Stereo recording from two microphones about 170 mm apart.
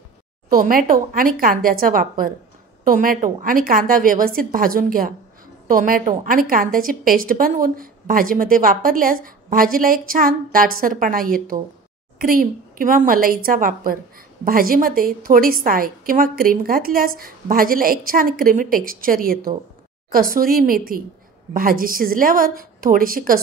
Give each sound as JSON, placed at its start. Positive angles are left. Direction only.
{"t": 0.5, "sound": "a woman's voice", "side_deg": -55}